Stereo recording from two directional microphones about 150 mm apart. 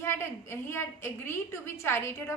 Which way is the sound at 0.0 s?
15° left (ahead or behind).